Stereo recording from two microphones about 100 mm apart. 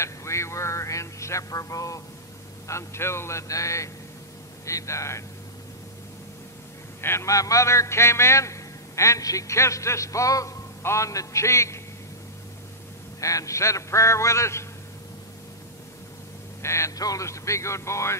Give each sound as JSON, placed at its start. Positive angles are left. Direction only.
{"t": 0.0, "sound": "speech", "side_deg": 30}
{"t": 7.0, "sound": "a man's voice", "side_deg": 25}
{"t": 13.2, "sound": "a man's voice", "side_deg": 35}
{"t": 16.6, "sound": "speech", "side_deg": 30}